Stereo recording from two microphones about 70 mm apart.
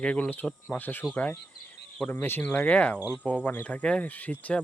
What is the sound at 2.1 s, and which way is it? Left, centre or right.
Speech, left.